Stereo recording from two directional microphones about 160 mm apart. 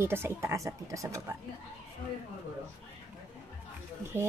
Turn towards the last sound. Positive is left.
turn(degrees=-15)  # may be behind; listen again after turning